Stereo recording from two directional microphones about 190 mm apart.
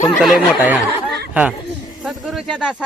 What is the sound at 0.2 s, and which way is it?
A man's voice, 5° right (ahead or behind).